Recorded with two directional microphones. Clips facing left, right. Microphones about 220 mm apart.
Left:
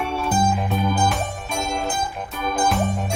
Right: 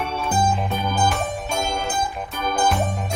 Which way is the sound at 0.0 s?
Centre (ahead or behind).